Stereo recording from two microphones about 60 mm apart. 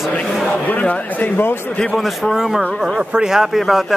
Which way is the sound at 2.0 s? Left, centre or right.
Centre.